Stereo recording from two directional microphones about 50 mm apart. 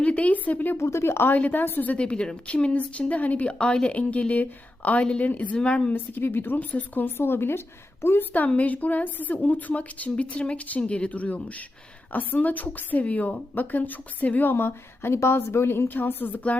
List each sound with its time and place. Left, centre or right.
0.0 s a woman's voice: left
0.8 s speech: left
1.3 s a woman's voice: left
1.9 s a woman's voice: left
5.5 s a woman's voice: centre
5.9 s a woman's voice: left
6.6 s a woman's voice: left
7.2 s a woman's voice: left
8.5 s a woman's voice: left
14.5 s a woman's voice: left